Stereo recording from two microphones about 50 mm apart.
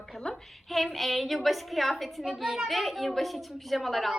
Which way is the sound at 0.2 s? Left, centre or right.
Centre.